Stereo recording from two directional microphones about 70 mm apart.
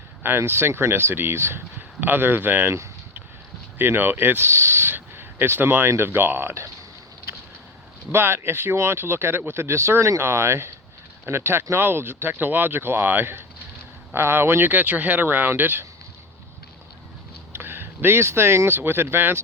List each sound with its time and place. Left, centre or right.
0.2 s speech: right
8.1 s speech: right
17.5 s speech: right